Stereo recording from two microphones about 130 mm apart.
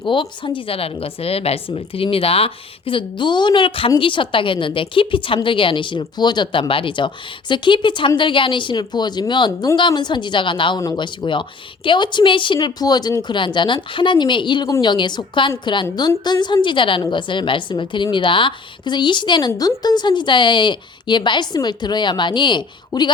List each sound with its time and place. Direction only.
0.0 s a woman's voice: 40° left (ahead or behind)